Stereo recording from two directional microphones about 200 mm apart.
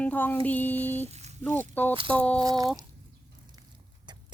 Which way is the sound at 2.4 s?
20° right (ahead or behind).